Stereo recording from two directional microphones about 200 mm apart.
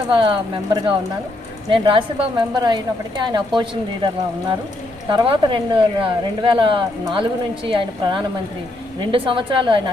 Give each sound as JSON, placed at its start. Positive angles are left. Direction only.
{"t": 0.1, "sound": "a woman's voice", "side_deg": -25}
{"t": 5.1, "sound": "a woman's voice", "side_deg": -25}